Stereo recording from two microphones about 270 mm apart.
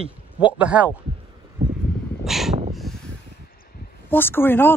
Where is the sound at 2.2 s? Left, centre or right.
Centre.